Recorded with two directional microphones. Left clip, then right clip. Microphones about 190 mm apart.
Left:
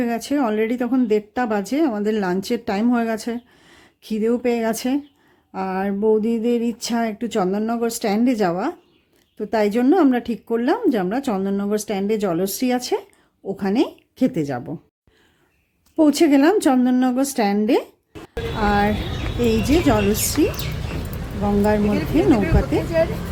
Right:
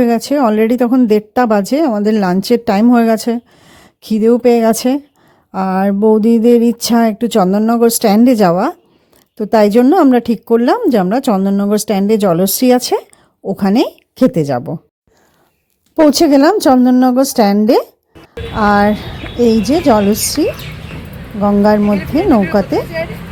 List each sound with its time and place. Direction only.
0.0 s a woman's voice: 35° right (ahead or behind)
16.1 s a woman's voice: 35° right (ahead or behind)